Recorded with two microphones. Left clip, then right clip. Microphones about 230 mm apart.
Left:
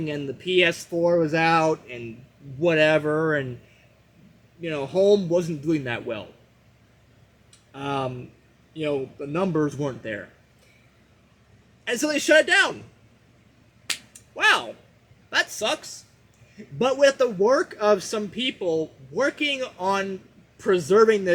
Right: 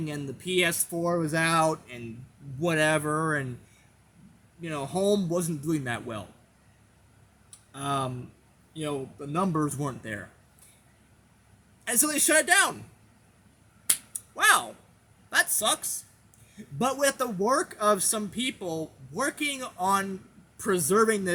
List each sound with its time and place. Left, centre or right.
0.0 s a man's voice: centre
4.6 s a man's voice: centre
7.7 s a man's voice: centre
11.9 s a man's voice: centre
13.8 s finger snapping: centre
15.3 s a man's voice: centre